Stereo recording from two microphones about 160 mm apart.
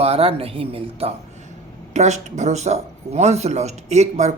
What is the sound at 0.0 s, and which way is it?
Speech, 40° right (ahead or behind).